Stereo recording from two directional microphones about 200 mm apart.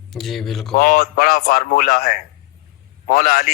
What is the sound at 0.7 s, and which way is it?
A man's voice, 45° left (ahead or behind).